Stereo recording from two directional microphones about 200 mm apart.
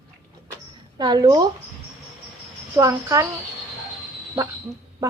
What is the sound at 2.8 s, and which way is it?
Speech, 15° right (ahead or behind).